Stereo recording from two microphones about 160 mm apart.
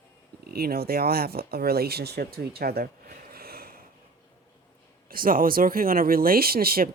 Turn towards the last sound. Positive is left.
turn(degrees=-70)  # may be behind; listen again after turning